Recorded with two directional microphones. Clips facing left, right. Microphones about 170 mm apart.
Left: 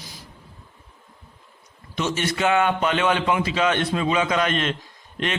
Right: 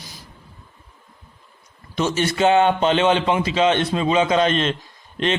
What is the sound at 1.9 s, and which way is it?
A man's voice, 35° right (ahead or behind).